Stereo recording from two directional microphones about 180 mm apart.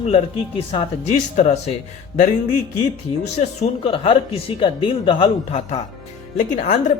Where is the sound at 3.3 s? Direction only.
35° left (ahead or behind).